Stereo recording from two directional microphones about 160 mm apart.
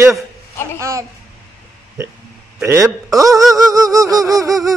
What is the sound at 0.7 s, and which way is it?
Speech, 20° right (ahead or behind).